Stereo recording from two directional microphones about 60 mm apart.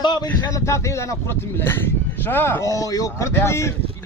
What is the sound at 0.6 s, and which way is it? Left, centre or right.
Speech, left.